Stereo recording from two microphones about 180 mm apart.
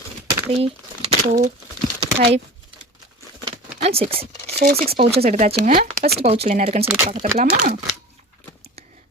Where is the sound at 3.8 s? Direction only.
35° right (ahead or behind).